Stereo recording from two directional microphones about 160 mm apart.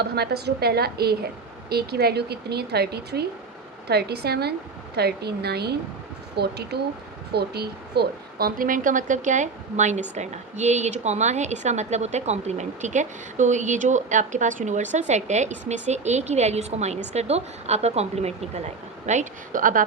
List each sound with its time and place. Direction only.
0.0 s a woman's voice: 90° right; by 19.8 s 55° right (ahead or behind)